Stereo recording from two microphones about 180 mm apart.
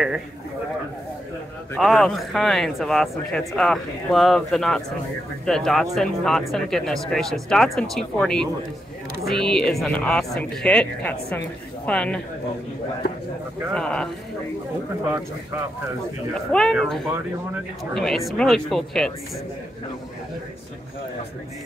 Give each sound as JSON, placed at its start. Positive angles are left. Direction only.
{"t": 1.8, "sound": "a man's voice", "side_deg": 0}
{"t": 13.7, "sound": "a man's voice", "side_deg": 5}
{"t": 16.5, "sound": "a man's voice", "side_deg": 0}